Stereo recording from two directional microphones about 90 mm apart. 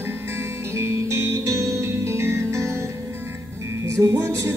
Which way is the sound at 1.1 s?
30° right (ahead or behind).